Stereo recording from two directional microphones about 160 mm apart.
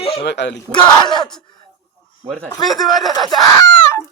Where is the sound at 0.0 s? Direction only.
35° left (ahead or behind).